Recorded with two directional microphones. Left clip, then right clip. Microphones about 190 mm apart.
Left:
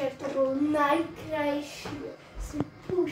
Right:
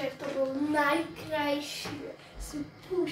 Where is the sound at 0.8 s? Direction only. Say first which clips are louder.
Left 3 dB; 15° left (ahead or behind).